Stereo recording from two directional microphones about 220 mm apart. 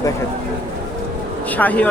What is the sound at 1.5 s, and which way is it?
Speech, 5° left (ahead or behind).